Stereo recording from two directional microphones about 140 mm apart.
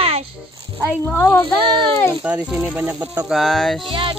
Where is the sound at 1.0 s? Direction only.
15° left (ahead or behind).